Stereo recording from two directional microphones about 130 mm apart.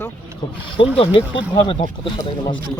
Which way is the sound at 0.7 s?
45° left (ahead or behind).